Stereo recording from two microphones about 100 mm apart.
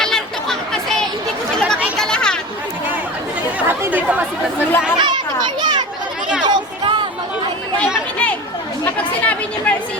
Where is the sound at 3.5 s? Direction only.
20° right (ahead or behind).